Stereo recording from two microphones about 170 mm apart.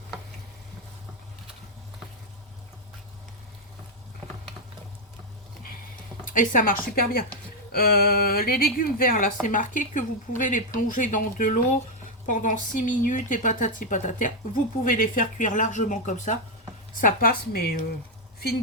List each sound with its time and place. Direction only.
6.2 s a woman's voice: 50° left (ahead or behind)